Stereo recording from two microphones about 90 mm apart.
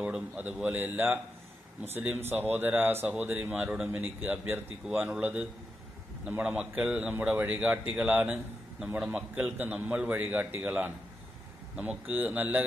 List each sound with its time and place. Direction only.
0.0 s speech: 15° right (ahead or behind)